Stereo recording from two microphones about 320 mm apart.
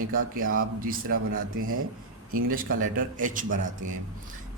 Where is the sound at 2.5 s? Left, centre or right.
Right.